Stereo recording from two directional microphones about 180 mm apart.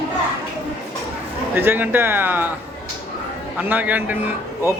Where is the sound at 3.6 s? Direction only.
10° right (ahead or behind).